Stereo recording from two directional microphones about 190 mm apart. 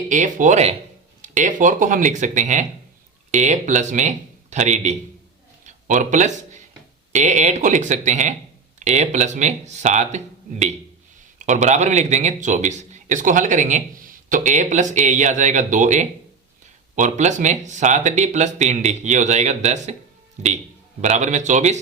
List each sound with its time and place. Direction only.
0.1 s a man's voice: 40° right (ahead or behind)
5.6 s a sound: 40° right (ahead or behind)
7.1 s a man's voice: 40° right (ahead or behind)
21.0 s a man's voice: 40° right (ahead or behind)